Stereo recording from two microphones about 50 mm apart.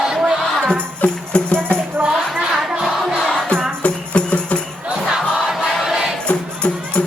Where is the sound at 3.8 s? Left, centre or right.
Left.